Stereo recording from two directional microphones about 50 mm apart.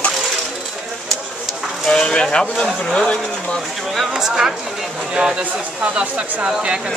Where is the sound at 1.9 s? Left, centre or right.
Centre.